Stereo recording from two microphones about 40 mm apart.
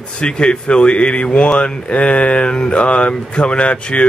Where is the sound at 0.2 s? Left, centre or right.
Left.